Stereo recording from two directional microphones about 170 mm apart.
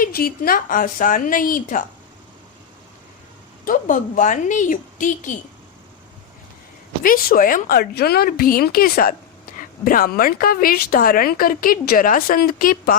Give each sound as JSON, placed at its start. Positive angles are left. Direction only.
{"t": 0.0, "sound": "a woman's voice", "side_deg": 60}
{"t": 3.7, "sound": "a woman's voice", "side_deg": 50}
{"t": 7.0, "sound": "speech", "side_deg": 55}